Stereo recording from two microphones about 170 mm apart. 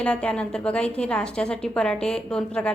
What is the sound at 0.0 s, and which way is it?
A woman's voice, 5° left (ahead or behind).